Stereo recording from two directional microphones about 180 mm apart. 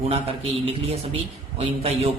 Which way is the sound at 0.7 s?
35° right (ahead or behind).